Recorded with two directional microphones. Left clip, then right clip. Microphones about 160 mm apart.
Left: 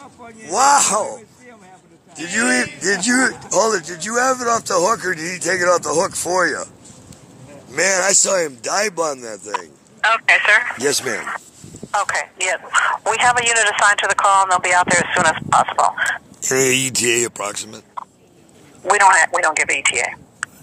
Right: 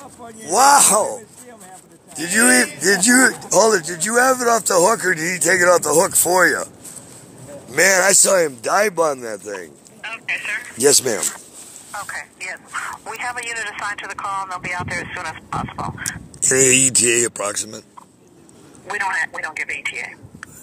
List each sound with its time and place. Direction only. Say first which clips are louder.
0.5 s speech: right 1 dB; 25° right (ahead or behind)
7.7 s speech: right 2 dB; 25° right (ahead or behind)
10.0 s speech: left 12 dB; 55° left (ahead or behind)
10.8 s speech: right 4 dB; 15° right (ahead or behind)
11.9 s speech: left 10 dB; 40° left (ahead or behind)
16.3 s speech: right 3 dB; centre (ahead or behind)
18.9 s a man's voice: left 10 dB; 40° left (ahead or behind)